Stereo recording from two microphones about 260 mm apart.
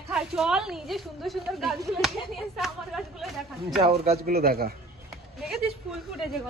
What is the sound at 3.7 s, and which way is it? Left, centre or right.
A man's voice, right.